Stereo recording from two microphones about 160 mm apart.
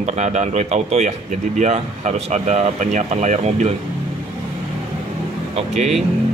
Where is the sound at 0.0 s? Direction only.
45° right (ahead or behind).